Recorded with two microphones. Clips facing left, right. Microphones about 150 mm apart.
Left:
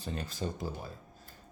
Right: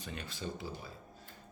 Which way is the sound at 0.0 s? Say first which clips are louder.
Left 5 dB; 35° left (ahead or behind).